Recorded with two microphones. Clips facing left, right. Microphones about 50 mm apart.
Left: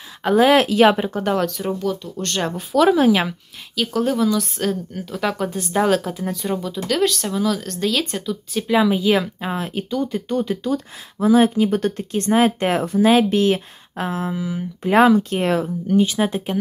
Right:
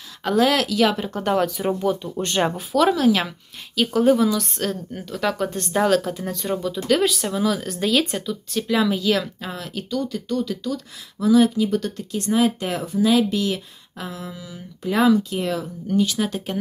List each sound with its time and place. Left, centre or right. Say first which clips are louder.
0.2 s speech: left 5 dB; centre
1.0 s speech: left 1 dB; centre
1.8 s speech: right 1 dB; centre
2.7 s speech: left 4 dB; centre
3.0 s speech: left 3 dB; centre
3.7 s speech: right 3 dB; centre
8.5 s speech: left 3 dB; centre; by 15.7 s left
16.0 s speech: left 2 dB; left